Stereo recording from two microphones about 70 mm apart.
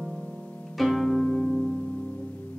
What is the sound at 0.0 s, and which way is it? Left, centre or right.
Harp, centre.